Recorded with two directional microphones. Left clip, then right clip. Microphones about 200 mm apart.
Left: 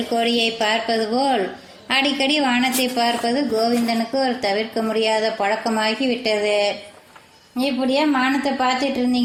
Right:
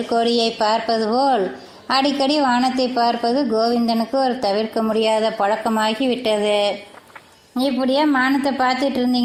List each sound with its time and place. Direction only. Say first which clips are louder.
0.3 s a woman's voice: right 2 dB; 25° right (ahead or behind)